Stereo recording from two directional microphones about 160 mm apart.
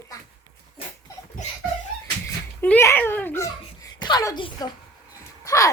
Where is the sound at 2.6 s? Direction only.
15° left (ahead or behind).